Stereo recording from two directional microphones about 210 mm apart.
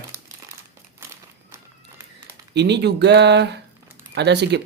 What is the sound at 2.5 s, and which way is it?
Speech, 55° right (ahead or behind).